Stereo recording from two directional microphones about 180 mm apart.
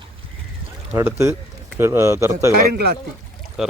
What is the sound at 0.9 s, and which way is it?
A man's voice, 15° right (ahead or behind).